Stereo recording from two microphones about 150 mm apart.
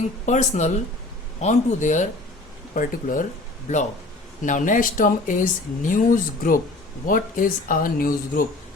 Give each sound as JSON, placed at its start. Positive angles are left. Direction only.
{"t": 0.3, "sound": "a man's voice", "side_deg": 50}
{"t": 4.4, "sound": "speech", "side_deg": 60}